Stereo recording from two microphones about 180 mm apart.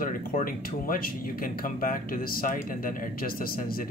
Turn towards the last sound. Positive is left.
turn(degrees=55)  # may be behind; listen again after turning